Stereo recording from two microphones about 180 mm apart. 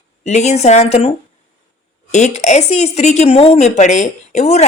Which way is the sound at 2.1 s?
40° left (ahead or behind).